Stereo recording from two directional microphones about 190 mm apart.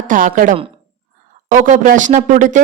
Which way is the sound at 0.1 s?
45° right (ahead or behind).